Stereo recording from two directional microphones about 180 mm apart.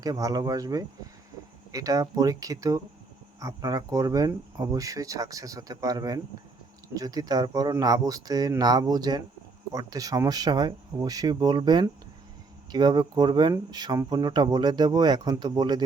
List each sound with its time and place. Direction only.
0.0 s speech: 20° right (ahead or behind)